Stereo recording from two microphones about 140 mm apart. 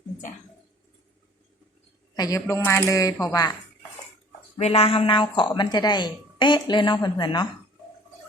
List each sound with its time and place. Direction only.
2.1 s speech: 25° left (ahead or behind)
4.5 s speech: 45° left (ahead or behind); by 7.4 s 30° left (ahead or behind)